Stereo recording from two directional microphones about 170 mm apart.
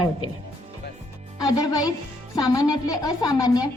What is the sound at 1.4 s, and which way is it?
A woman's voice, 20° left (ahead or behind).